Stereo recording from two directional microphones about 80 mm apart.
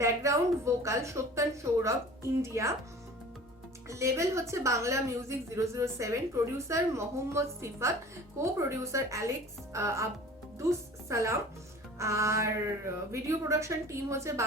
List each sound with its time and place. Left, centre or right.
0.0 s a woman's voice: right
3.8 s a woman's voice: right